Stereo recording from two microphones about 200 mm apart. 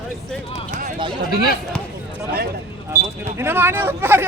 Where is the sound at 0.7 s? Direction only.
40° right (ahead or behind).